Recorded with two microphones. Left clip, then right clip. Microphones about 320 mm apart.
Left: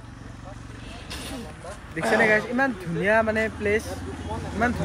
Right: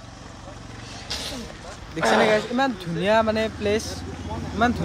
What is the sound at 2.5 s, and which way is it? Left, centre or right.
Speech, centre.